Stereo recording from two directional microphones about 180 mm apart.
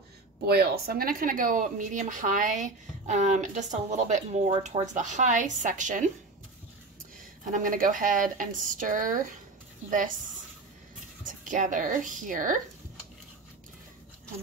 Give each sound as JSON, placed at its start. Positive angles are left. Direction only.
{"t": 0.5, "sound": "speech", "side_deg": -60}
{"t": 7.5, "sound": "speech", "side_deg": -50}
{"t": 11.2, "sound": "speech", "side_deg": -45}